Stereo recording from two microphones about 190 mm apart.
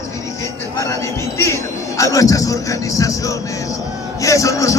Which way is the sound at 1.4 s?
15° left (ahead or behind).